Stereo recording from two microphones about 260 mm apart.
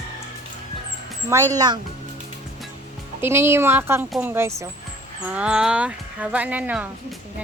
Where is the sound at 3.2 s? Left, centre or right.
Centre.